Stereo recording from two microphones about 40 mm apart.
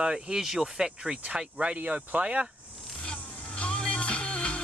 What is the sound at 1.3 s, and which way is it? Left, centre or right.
Speech, right.